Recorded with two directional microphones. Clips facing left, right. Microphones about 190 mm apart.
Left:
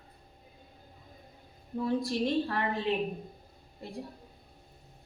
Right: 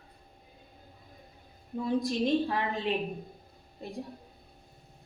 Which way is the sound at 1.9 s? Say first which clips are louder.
Right 2 dB; 20° right (ahead or behind).